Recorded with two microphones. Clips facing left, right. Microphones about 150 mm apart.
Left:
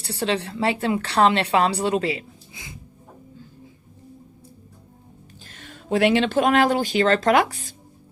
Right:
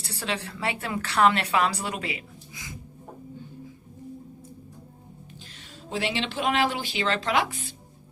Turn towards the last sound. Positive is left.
turn(degrees=40)  # may be behind; listen again after turning